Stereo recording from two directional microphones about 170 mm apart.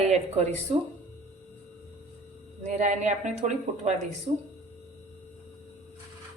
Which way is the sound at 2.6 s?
45° right (ahead or behind).